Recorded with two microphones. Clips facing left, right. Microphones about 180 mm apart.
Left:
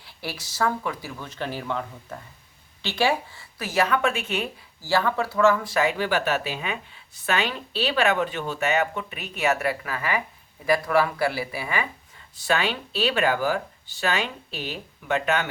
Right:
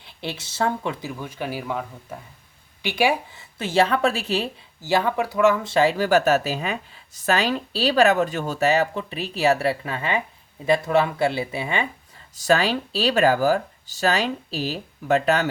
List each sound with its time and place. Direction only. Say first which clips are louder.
0.0 s speech: right 3 dB; 20° right (ahead or behind)
1.2 s speech: even; 10° right (ahead or behind)
3.6 s speech: right 3 dB; 30° right (ahead or behind)
4.8 s speech: right 2 dB; 20° right (ahead or behind)
12.4 s speech: right 5 dB; 40° right (ahead or behind)